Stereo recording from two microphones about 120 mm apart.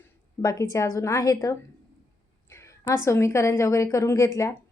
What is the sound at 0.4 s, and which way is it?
Speech, 25° left (ahead or behind).